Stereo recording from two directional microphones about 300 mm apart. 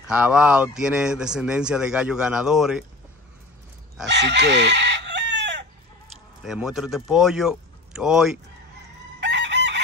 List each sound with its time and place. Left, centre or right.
0.1 s a man's voice: centre
4.0 s chicken: right
6.4 s a man's voice: centre
9.2 s chicken: right